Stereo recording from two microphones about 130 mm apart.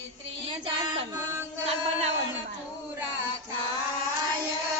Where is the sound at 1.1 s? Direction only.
15° right (ahead or behind).